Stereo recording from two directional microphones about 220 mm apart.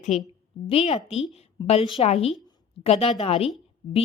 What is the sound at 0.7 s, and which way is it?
A woman's voice, 25° left (ahead or behind).